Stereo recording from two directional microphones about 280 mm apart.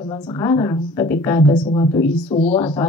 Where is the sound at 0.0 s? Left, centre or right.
Centre.